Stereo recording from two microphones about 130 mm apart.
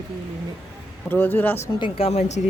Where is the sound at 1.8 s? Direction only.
45° left (ahead or behind).